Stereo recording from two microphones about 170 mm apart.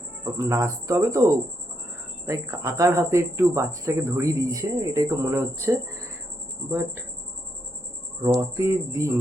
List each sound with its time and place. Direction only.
0.3 s speech: 20° right (ahead or behind)
8.2 s speech: 15° right (ahead or behind)